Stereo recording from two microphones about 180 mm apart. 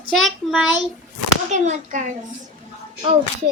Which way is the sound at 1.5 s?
45° right (ahead or behind).